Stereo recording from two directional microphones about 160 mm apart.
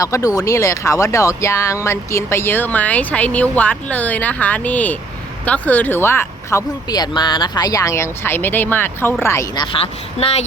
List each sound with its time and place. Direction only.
0.0 s speech: 20° left (ahead or behind)
9.8 s a woman's voice: 40° left (ahead or behind)